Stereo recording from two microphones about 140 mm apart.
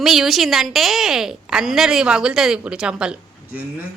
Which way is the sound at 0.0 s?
Centre (ahead or behind).